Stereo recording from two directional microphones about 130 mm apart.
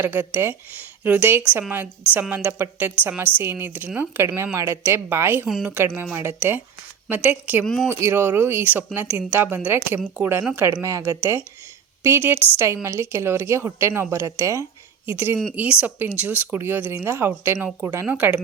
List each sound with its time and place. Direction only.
0.0 s a woman's voice: 15° right (ahead or behind)
7.6 s speech: 5° left (ahead or behind)
7.9 s a woman's voice: 20° right (ahead or behind)